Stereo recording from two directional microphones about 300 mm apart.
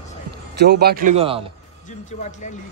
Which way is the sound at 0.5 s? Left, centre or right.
Right.